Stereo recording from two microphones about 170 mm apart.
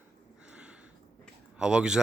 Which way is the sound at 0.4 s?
5° right (ahead or behind).